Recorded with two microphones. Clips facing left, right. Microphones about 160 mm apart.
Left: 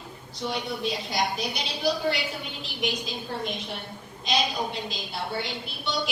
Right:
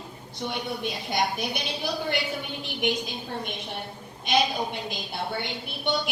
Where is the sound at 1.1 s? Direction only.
55° right (ahead or behind).